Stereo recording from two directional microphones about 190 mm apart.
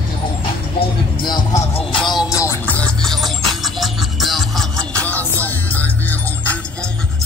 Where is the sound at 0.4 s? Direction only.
25° left (ahead or behind).